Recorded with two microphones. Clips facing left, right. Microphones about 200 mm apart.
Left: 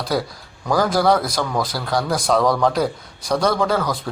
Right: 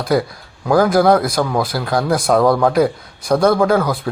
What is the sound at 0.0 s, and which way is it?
Speech, 50° right (ahead or behind).